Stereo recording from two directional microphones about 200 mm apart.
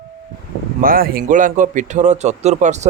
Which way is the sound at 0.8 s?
45° right (ahead or behind).